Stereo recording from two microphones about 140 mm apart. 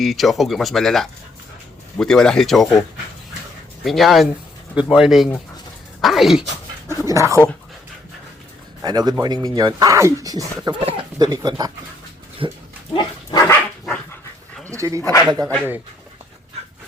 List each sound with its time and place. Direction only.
0.0 s speech: centre (ahead or behind)
3.8 s speech: centre (ahead or behind)
6.8 s speech: 20° right (ahead or behind)
8.8 s speech: 30° right (ahead or behind)
10.8 s speech: 45° right (ahead or behind)
11.2 s speech: 30° right (ahead or behind)
12.9 s dog: 30° left (ahead or behind)
13.5 s dog: 10° left (ahead or behind)
14.7 s speech: 25° right (ahead or behind)